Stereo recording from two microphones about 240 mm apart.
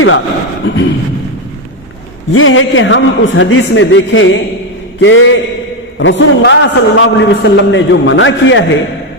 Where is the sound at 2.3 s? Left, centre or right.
Left.